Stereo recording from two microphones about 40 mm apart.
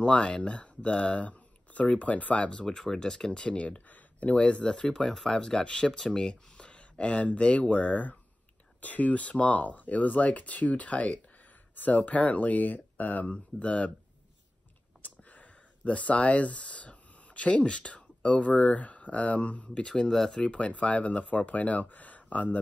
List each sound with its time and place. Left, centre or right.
0.0 s speech: left
4.4 s speech: left
4.9 s speech: centre; by 13.3 s left
13.3 s speech: left
15.0 s a sound: left
18.7 s speech: left
19.9 s speech: centre
20.4 s speech: left